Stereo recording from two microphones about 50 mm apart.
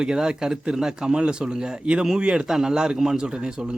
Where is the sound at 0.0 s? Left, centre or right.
Centre.